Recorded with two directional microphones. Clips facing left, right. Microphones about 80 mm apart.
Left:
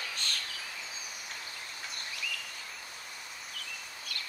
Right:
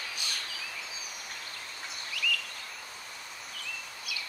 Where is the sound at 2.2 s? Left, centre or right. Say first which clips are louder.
Right 8 dB; left.